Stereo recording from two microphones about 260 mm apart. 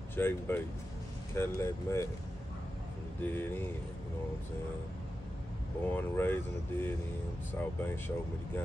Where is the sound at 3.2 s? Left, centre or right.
Centre.